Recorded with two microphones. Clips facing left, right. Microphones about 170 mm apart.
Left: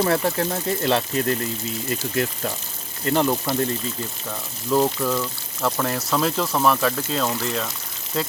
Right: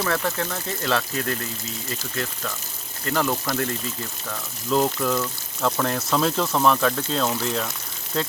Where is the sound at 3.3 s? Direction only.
10° left (ahead or behind).